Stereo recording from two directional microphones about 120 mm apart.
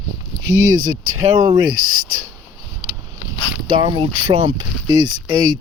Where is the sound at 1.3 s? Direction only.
40° right (ahead or behind).